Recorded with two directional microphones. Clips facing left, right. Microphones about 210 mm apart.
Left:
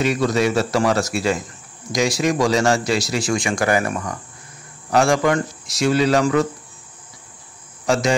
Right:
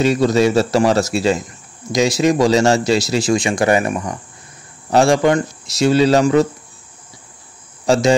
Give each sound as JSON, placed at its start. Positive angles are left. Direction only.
{"t": 0.0, "sound": "speech", "side_deg": -30}
{"t": 7.8, "sound": "speech", "side_deg": -30}